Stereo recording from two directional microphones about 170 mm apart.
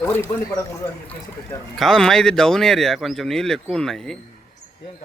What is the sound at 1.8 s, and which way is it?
Speech, centre (ahead or behind).